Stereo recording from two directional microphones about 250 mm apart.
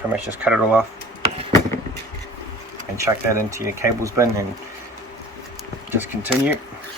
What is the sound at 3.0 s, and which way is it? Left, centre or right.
Speech, centre.